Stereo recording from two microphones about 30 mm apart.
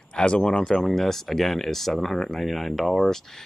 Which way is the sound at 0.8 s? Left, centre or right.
Centre.